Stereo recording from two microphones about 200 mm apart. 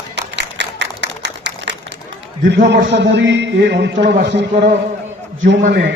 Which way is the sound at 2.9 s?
60° right (ahead or behind).